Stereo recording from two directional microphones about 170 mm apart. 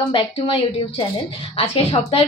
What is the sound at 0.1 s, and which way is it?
Speech, 30° left (ahead or behind).